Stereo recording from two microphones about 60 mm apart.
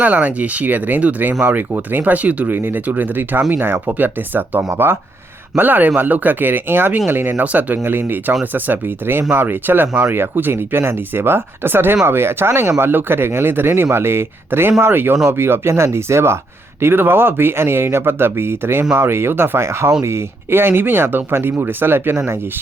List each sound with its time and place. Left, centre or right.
0.0 s speech: right
7.4 s speech: right
7.9 s speech: right
16.8 s speech: right